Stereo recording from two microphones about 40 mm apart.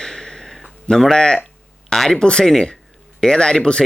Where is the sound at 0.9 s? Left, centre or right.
Centre.